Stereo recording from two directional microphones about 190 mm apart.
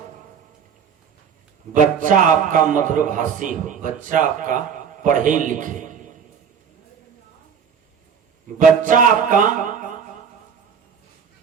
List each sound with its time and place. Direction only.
1.7 s a man's voice: 45° right (ahead or behind)
8.5 s a man's voice: 45° right (ahead or behind)